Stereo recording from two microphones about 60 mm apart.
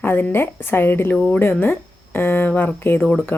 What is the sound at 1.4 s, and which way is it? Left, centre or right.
Speech, left.